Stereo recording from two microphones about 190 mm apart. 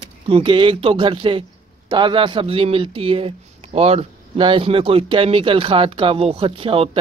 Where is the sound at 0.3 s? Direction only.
25° right (ahead or behind).